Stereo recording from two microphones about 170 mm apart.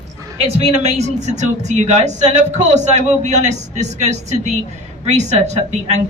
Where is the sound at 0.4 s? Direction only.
40° right (ahead or behind).